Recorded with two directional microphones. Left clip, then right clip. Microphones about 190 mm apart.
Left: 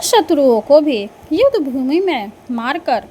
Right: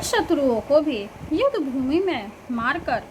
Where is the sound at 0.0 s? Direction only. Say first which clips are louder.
Left 9 dB; 25° left (ahead or behind).